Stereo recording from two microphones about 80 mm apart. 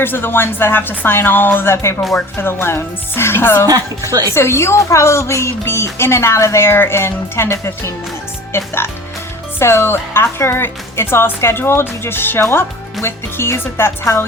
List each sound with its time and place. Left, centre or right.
0.0 s a woman's voice: left
3.7 s a woman's voice: right
4.4 s speech: left